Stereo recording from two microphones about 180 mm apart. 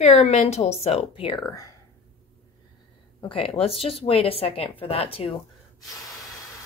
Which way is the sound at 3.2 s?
30° left (ahead or behind).